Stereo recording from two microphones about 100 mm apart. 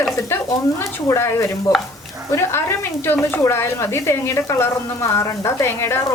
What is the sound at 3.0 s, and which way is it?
A woman's voice, 20° left (ahead or behind).